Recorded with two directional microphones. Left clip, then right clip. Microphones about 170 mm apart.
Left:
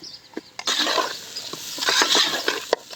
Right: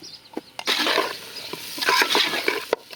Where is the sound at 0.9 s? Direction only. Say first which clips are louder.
Right 1 dB; 15° right (ahead or behind).